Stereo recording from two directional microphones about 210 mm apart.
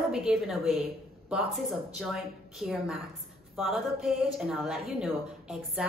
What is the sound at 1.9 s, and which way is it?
A woman's voice, centre (ahead or behind).